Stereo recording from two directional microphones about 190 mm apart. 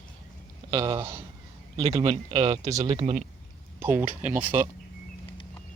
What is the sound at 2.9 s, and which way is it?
Speech, 30° right (ahead or behind).